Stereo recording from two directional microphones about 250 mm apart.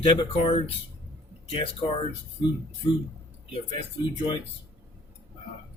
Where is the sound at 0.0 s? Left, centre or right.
Left.